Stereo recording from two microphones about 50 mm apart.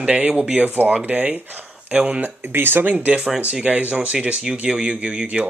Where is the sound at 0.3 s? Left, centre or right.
Centre.